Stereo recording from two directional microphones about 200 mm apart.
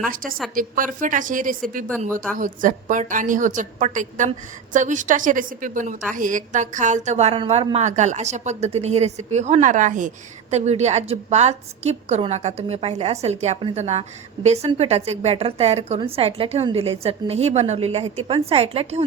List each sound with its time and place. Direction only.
0.1 s a woman's voice: 45° right (ahead or behind)